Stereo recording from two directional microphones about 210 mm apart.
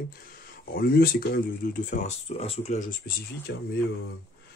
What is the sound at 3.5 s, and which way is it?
Speech, 55° left (ahead or behind).